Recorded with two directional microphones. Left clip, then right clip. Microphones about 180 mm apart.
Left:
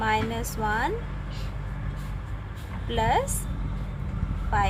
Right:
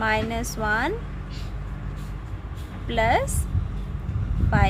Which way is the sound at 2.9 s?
25° right (ahead or behind).